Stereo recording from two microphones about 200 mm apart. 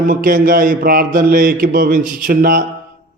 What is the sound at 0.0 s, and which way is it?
Speech, 40° right (ahead or behind).